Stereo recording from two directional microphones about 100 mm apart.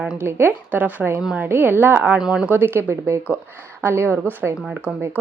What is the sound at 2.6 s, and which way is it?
Speech, 25° right (ahead or behind).